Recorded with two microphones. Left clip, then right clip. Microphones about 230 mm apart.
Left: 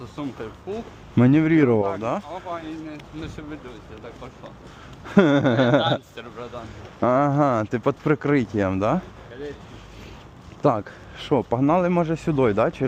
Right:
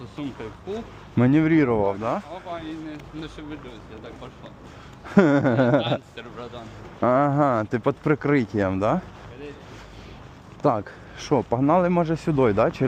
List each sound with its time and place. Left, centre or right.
0.2 s speech: centre
1.1 s speech: centre
2.3 s speech: centre
5.0 s speech: centre
10.6 s speech: centre